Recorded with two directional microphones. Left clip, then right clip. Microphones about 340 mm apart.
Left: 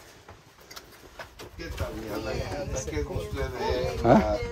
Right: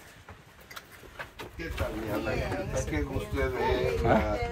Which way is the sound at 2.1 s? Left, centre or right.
Centre.